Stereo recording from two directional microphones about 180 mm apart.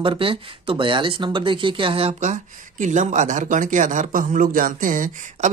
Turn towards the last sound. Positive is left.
turn(degrees=-45)  # may be behind; listen again after turning